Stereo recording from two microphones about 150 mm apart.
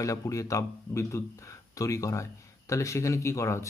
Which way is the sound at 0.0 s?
20° left (ahead or behind).